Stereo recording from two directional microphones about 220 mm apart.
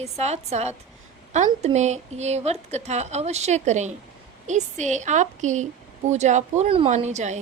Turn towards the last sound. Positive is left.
turn(degrees=-30)  # may be behind; listen again after turning